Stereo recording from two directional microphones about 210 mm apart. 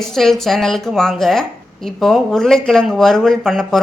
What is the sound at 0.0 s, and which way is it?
A woman's voice, centre (ahead or behind).